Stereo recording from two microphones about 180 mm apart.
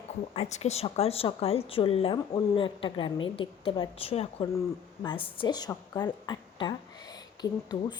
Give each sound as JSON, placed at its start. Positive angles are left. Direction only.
{"t": 0.3, "sound": "a woman's voice", "side_deg": 40}